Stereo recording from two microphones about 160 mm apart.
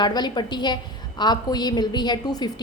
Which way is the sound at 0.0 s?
25° left (ahead or behind).